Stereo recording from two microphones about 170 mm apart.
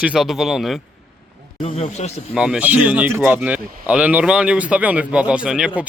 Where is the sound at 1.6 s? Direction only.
35° left (ahead or behind).